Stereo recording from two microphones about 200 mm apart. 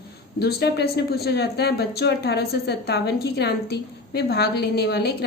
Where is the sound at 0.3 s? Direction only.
55° left (ahead or behind).